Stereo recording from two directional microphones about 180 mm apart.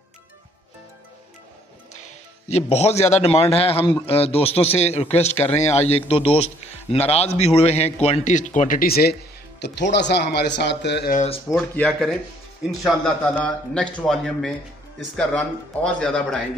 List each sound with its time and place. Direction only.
2.0 s a man's voice: 35° left (ahead or behind); by 9.1 s 55° left (ahead or behind)
9.6 s a man's voice: 70° left (ahead or behind)
11.7 s a man's voice: 5° left (ahead or behind)